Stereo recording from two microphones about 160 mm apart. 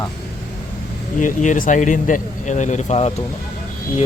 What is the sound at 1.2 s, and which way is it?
Speech, 50° left (ahead or behind).